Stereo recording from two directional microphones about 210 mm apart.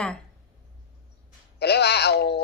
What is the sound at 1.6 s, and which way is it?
Speech, 50° left (ahead or behind).